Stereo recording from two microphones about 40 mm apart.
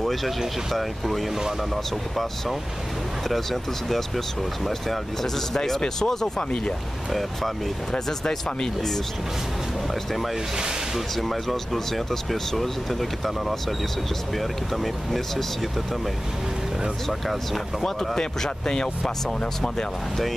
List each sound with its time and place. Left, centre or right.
0.0 s vehicle: centre
0.7 s speech: centre
4.6 s speech: centre
7.1 s speech: centre
7.9 s speech: centre
11.1 s speech: centre
14.8 s speech: centre
17.8 s speech: centre